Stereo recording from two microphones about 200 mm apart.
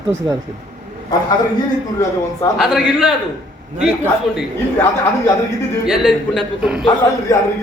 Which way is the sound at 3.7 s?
5° right (ahead or behind).